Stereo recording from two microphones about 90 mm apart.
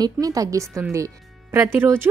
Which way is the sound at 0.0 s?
40° right (ahead or behind).